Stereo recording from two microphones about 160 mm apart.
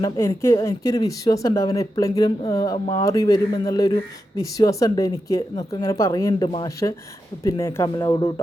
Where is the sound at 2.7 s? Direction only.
40° left (ahead or behind).